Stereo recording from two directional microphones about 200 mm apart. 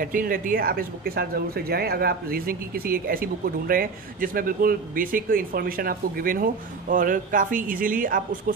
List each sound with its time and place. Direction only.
0.0 s speech: 45° right (ahead or behind)